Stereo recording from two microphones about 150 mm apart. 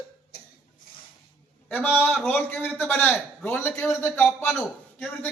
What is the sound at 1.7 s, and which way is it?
A man's voice, 15° left (ahead or behind).